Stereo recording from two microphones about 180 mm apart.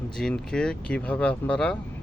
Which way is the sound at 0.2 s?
5° left (ahead or behind).